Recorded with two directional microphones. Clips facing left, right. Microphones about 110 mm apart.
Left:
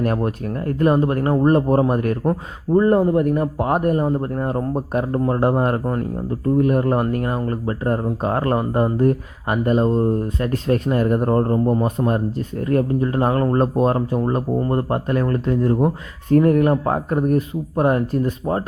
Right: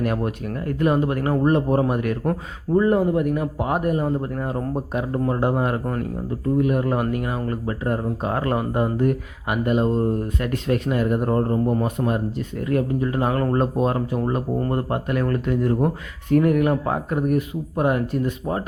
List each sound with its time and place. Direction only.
0.0 s speech: 40° left (ahead or behind)